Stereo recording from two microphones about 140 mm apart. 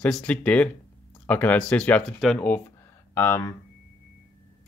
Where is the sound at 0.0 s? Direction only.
10° left (ahead or behind).